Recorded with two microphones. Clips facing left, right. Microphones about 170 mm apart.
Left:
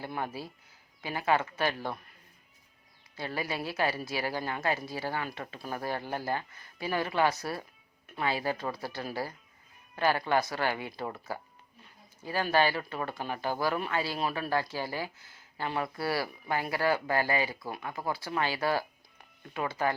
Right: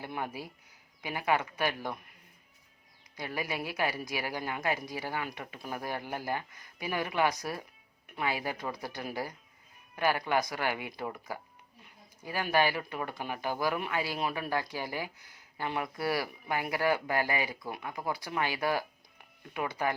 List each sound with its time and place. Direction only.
0.0 s speech: 15° right (ahead or behind)
3.2 s speech: 15° right (ahead or behind)